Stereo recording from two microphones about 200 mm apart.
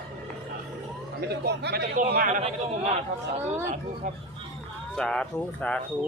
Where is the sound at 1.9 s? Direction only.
45° right (ahead or behind).